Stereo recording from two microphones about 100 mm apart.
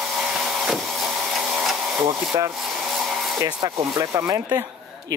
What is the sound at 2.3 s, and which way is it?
Speech, 35° right (ahead or behind).